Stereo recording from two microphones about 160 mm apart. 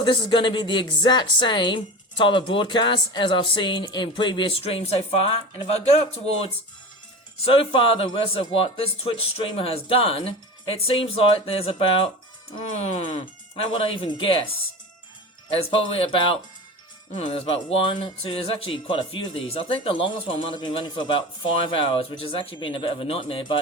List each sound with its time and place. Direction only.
0.0 s a woman's voice: 30° left (ahead or behind)
13.7 s speech: 35° left (ahead or behind)